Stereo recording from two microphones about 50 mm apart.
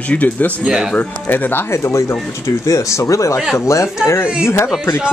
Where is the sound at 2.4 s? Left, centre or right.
Left.